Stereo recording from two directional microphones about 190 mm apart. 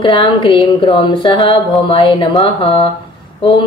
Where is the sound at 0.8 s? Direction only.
25° left (ahead or behind).